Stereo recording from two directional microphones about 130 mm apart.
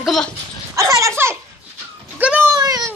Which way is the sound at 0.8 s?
25° right (ahead or behind).